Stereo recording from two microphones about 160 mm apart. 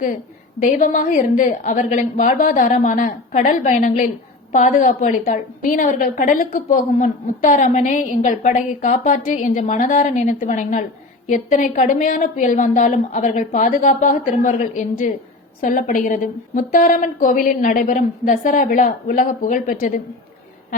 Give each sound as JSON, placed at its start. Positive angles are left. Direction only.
{"t": 0.6, "sound": "a woman's voice", "side_deg": 55}